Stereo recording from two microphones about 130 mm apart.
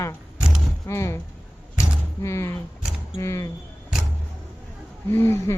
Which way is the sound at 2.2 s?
25° left (ahead or behind).